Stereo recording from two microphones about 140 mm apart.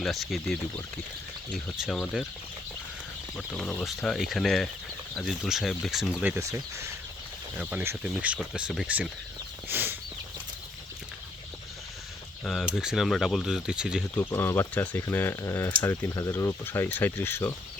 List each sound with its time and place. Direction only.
0.0 s speech: centre (ahead or behind)
1.8 s speech: centre (ahead or behind)
3.3 s speech: 5° left (ahead or behind)
6.4 s speech: 20° right (ahead or behind)
7.6 s speech: 10° right (ahead or behind)
9.6 s a sound: 15° right (ahead or behind)
12.5 s speech: 5° right (ahead or behind)
14.2 s speech: 15° left (ahead or behind)